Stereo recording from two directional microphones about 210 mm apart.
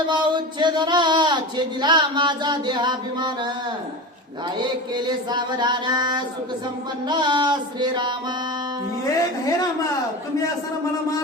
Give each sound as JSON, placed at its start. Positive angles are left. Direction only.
{"t": 0.0, "sound": "speech", "side_deg": -20}
{"t": 4.5, "sound": "speech", "side_deg": -20}